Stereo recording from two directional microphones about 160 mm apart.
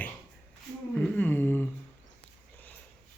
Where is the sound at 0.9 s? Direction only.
5° left (ahead or behind).